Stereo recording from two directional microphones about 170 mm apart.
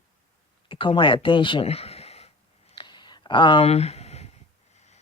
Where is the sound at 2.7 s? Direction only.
25° left (ahead or behind).